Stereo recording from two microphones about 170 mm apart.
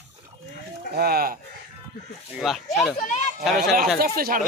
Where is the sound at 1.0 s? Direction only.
65° right (ahead or behind).